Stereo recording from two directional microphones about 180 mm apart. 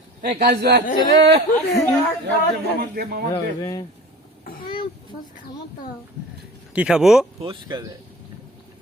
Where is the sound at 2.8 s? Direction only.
60° right (ahead or behind).